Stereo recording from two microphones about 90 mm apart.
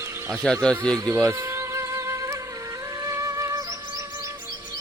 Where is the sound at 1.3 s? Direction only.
30° right (ahead or behind).